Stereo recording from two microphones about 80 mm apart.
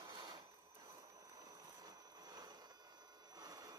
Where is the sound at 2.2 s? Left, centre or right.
Right.